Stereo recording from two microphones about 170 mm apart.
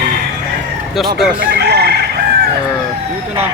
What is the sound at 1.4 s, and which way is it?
Chicken, 70° right (ahead or behind).